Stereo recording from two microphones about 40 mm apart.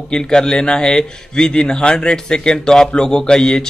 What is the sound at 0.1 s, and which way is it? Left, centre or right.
A man's voice, centre.